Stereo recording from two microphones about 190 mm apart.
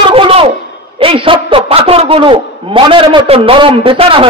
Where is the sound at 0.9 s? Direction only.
30° right (ahead or behind).